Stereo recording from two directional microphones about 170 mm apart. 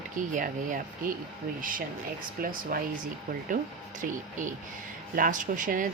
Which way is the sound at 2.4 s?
55° right (ahead or behind).